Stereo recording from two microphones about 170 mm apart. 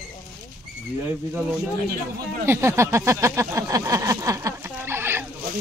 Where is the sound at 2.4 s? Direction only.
15° right (ahead or behind).